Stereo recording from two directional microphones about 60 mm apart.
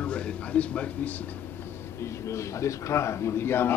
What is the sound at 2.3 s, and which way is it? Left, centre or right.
A man's voice, left.